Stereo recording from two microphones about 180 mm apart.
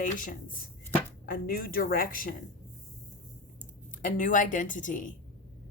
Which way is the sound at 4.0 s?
45° left (ahead or behind).